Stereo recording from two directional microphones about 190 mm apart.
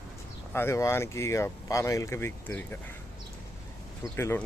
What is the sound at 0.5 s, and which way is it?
Speech, 15° left (ahead or behind).